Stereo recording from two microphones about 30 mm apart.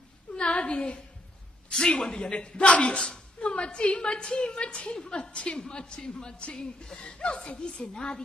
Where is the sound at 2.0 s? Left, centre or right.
Left.